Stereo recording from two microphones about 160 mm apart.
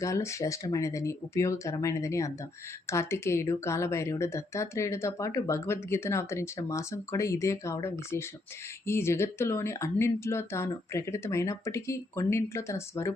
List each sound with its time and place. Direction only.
0.0 s speech: 20° left (ahead or behind)